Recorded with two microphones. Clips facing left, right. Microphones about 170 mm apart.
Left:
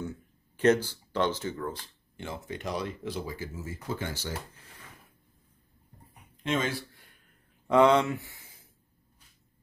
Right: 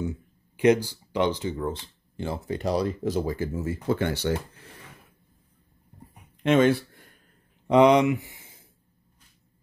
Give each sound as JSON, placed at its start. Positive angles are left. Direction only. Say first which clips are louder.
{"t": 0.0, "sound": "speech", "louder": "right 6 dB", "side_deg": -15}
{"t": 2.1, "sound": "speech", "louder": "right 7 dB", "side_deg": -35}
{"t": 6.4, "sound": "speech", "louder": "right 10 dB", "side_deg": -65}
{"t": 7.6, "sound": "speech", "louder": "right 4 dB", "side_deg": -15}